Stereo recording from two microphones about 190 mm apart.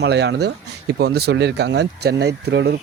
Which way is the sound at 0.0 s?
65° right (ahead or behind).